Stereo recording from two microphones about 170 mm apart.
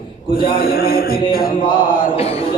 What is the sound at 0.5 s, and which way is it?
A man's voice, 65° left (ahead or behind).